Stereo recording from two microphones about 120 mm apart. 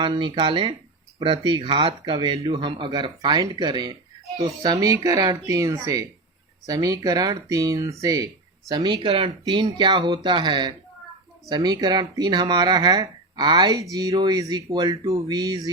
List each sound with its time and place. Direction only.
0.0 s speech: 40° right (ahead or behind)
9.0 s speech: 55° right (ahead or behind)
9.5 s speech: 40° right (ahead or behind)